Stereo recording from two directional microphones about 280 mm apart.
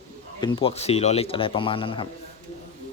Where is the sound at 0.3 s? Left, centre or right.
Centre.